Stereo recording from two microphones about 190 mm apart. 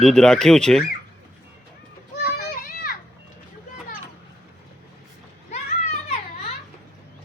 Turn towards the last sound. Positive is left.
turn(degrees=35)  # may be behind; listen again after turning